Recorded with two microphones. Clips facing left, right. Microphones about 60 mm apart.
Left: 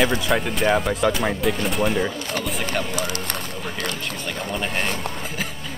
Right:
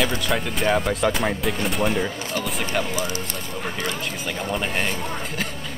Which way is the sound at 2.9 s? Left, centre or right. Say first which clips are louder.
Even; left.